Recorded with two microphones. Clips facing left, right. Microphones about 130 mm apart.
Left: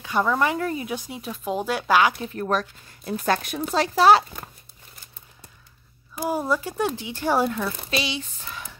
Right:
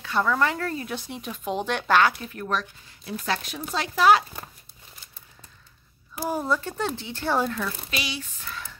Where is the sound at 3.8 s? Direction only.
35° left (ahead or behind).